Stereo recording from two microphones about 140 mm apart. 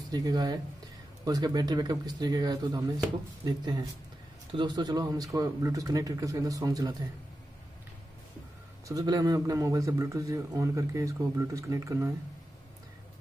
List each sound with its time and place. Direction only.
0.1 s a man's voice: 30° right (ahead or behind)
8.8 s a man's voice: 25° right (ahead or behind)